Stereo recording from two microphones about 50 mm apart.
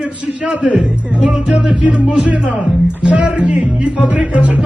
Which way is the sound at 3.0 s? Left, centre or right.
Right.